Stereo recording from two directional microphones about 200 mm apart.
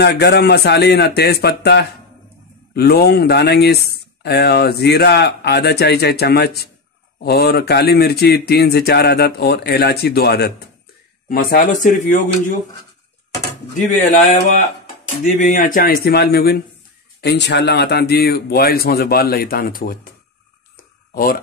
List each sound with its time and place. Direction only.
0.0 s speech: 55° left (ahead or behind)
11.2 s speech: 45° left (ahead or behind)
13.9 s speech: 35° left (ahead or behind)
21.1 s speech: 45° left (ahead or behind)